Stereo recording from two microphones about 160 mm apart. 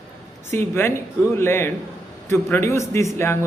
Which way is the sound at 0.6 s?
15° left (ahead or behind).